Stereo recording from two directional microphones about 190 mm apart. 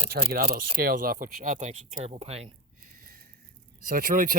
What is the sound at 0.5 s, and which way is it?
Speech, 50° right (ahead or behind).